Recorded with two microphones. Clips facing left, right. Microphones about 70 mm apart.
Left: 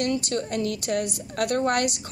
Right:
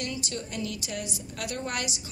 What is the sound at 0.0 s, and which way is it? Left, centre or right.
A woman's voice, left.